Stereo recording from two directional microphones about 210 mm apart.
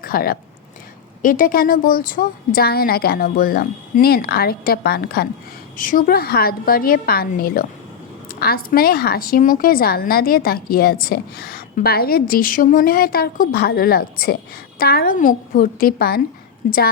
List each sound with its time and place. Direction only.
0.0 s speech: 45° left (ahead or behind)